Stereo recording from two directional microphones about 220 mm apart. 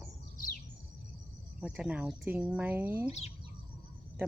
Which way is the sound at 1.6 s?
5° right (ahead or behind).